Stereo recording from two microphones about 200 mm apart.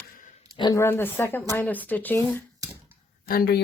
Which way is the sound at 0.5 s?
20° left (ahead or behind).